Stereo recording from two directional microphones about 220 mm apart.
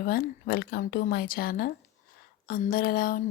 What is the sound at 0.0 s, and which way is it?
A woman's voice, 40° left (ahead or behind).